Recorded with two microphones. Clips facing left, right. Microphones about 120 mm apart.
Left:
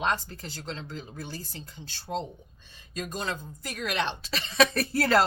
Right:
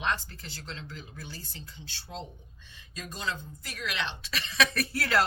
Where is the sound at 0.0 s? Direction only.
40° left (ahead or behind).